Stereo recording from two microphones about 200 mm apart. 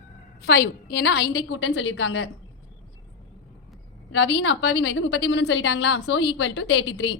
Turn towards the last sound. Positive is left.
turn(degrees=60)  # may be behind; listen again after turning